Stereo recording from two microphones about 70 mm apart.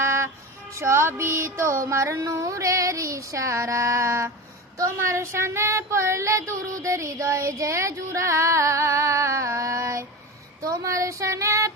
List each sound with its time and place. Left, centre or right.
0.0 s music: right
2.2 s child singing: right